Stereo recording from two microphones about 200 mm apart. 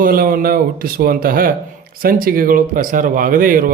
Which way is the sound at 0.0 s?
45° right (ahead or behind).